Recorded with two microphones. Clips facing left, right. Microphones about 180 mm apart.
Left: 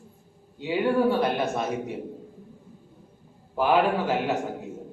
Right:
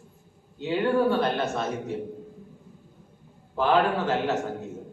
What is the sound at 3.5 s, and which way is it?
Speech, 10° left (ahead or behind).